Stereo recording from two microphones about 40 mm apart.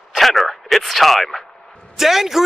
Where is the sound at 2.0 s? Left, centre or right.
Centre.